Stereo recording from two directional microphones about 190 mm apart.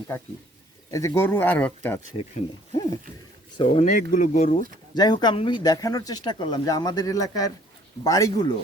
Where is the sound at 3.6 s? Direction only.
35° left (ahead or behind).